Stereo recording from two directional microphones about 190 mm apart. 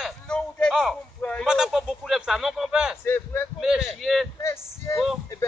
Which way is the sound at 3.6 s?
Centre (ahead or behind).